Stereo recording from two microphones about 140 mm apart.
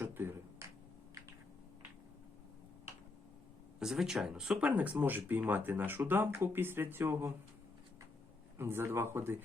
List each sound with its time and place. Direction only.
0.0 s a sound: 15° right (ahead or behind)
3.8 s speech: 5° right (ahead or behind)
8.5 s speech: 15° right (ahead or behind)